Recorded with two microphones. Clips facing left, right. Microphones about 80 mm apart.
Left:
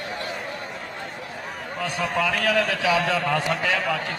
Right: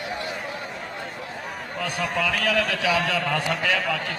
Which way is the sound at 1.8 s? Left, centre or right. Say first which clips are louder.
Left 1 dB; left.